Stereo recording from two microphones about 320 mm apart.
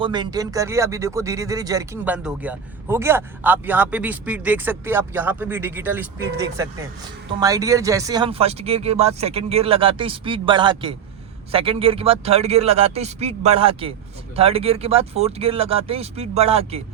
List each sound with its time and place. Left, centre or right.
0.0 s a man's voice: centre